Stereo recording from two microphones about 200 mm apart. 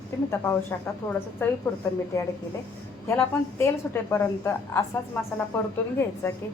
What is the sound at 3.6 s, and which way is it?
A woman's voice, 15° left (ahead or behind).